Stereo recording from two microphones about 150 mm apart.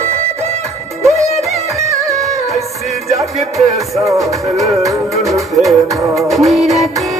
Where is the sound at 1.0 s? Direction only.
20° right (ahead or behind).